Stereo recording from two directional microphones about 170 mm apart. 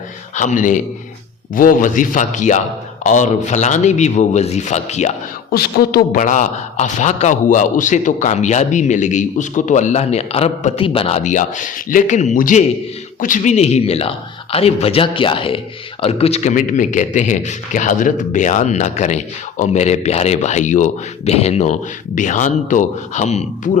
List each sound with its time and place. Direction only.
0.3 s a man's voice: 50° left (ahead or behind)
5.5 s a man's voice: 65° left (ahead or behind); by 23.7 s 45° left (ahead or behind)